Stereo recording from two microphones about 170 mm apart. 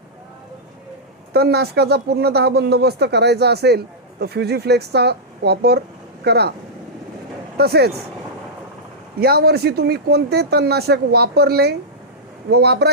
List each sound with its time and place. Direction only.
1.3 s speech: 65° right (ahead or behind)
7.5 s speech: 70° right (ahead or behind)
9.1 s speech: 65° right (ahead or behind)